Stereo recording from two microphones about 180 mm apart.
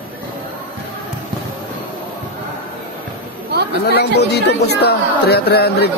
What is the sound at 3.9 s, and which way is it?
Speech, 65° left (ahead or behind).